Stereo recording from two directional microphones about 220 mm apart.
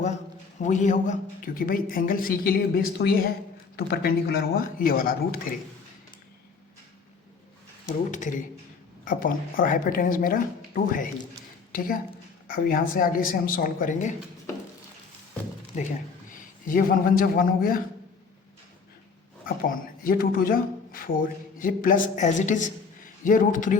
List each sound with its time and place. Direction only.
0.6 s a man's voice: 35° left (ahead or behind)
8.1 s a man's voice: 35° left (ahead or behind)
15.7 s a man's voice: 30° left (ahead or behind)
19.5 s a man's voice: 40° left (ahead or behind)